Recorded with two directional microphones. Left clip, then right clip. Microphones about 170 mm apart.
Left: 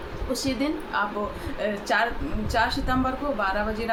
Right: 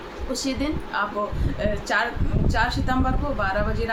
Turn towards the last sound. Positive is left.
turn(degrees=-5)  # may be behind; listen again after turning